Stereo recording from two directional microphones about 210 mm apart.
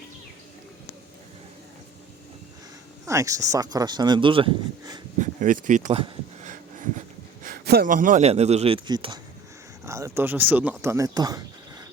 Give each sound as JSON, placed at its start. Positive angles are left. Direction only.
{"t": 3.1, "sound": "speech", "side_deg": -15}
{"t": 5.2, "sound": "a sound", "side_deg": -35}
{"t": 7.4, "sound": "a man's voice", "side_deg": -45}
{"t": 9.8, "sound": "speech", "side_deg": -15}